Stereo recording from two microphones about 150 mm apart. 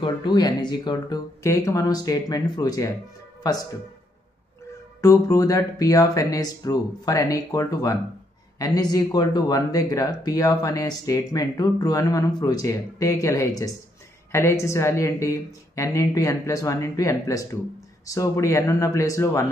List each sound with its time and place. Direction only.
0.0 s speech: 30° left (ahead or behind)
5.0 s speech: 20° left (ahead or behind)